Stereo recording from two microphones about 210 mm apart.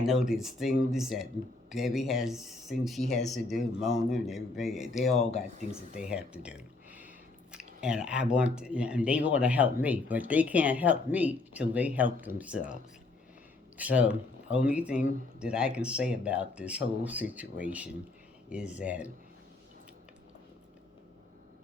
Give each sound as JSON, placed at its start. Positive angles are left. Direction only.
{"t": 0.0, "sound": "speech", "side_deg": 0}
{"t": 5.2, "sound": "speech", "side_deg": 30}
{"t": 6.0, "sound": "speech", "side_deg": -5}
{"t": 13.7, "sound": "speech", "side_deg": -5}